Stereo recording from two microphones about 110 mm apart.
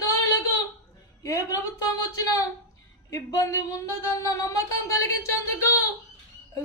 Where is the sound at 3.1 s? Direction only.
30° left (ahead or behind).